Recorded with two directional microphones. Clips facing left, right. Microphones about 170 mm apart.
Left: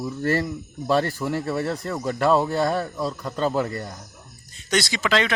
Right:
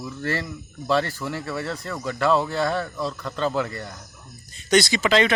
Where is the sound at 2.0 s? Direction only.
45° left (ahead or behind).